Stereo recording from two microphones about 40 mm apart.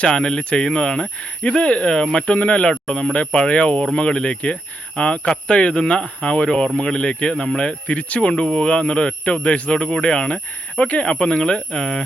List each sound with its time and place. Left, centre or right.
0.0 s a man's voice: centre